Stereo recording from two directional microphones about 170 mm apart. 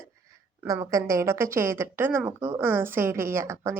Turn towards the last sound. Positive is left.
turn(degrees=-15)  # may be behind; listen again after turning